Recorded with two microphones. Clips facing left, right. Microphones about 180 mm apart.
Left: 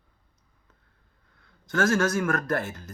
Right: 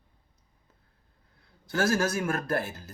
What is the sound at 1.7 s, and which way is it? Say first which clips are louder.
A woman's voice: left 3 dB; 35° right (ahead or behind).